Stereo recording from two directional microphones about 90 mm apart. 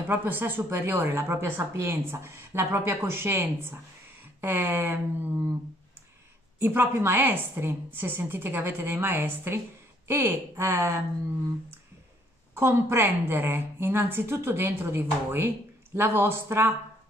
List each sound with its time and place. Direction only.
0.1 s a woman's voice: 20° right (ahead or behind)
6.6 s a woman's voice: 25° right (ahead or behind)
12.5 s a woman's voice: 30° right (ahead or behind)